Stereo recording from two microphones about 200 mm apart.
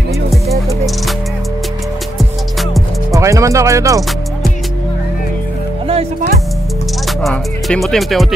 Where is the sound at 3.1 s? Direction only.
15° right (ahead or behind).